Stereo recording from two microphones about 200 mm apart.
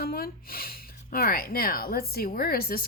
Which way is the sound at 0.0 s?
50° left (ahead or behind).